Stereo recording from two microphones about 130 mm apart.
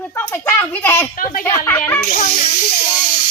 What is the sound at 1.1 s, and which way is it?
Speech, 90° left.